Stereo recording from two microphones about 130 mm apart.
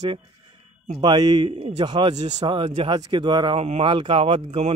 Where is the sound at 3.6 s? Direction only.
50° right (ahead or behind).